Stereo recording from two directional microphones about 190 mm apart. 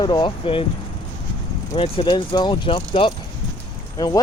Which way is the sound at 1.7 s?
25° left (ahead or behind).